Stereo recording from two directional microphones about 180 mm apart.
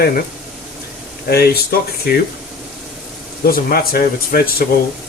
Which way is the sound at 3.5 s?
55° left (ahead or behind).